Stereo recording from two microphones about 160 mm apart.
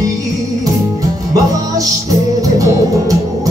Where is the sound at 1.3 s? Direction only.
20° right (ahead or behind).